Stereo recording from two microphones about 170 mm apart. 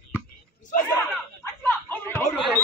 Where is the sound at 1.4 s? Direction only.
10° left (ahead or behind).